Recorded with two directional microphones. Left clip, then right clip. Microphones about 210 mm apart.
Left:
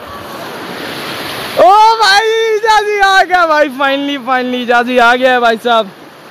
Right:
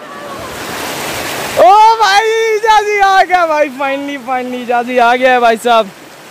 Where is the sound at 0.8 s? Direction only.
45° right (ahead or behind).